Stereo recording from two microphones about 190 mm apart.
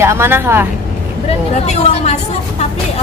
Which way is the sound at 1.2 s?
35° left (ahead or behind).